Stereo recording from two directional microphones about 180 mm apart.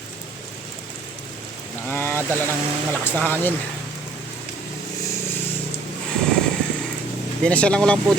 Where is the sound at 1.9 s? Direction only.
10° left (ahead or behind).